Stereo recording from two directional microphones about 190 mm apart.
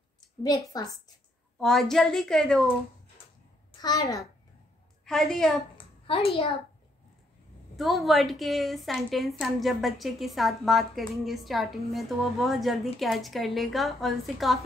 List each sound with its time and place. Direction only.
0.7 s a woman's voice: 20° left (ahead or behind)
1.6 s a woman's voice: centre (ahead or behind)
3.8 s a child's voice: 15° left (ahead or behind)
5.0 s a woman's voice: centre (ahead or behind)
5.8 s a sound: 30° left (ahead or behind)
7.7 s a woman's voice: centre (ahead or behind)